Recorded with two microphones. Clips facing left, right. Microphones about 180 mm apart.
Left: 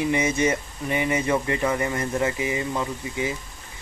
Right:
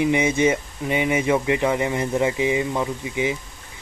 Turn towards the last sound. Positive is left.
turn(degrees=-15)  # may be behind; listen again after turning